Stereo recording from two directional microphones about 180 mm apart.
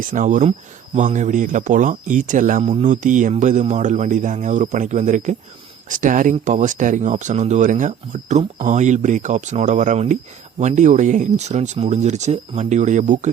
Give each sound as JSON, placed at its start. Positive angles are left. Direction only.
{"t": 0.0, "sound": "speech", "side_deg": -45}